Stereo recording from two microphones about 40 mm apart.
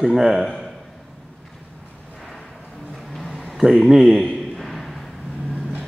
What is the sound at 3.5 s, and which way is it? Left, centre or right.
Speech, centre.